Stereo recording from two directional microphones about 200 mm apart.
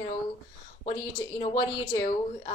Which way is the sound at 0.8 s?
30° left (ahead or behind).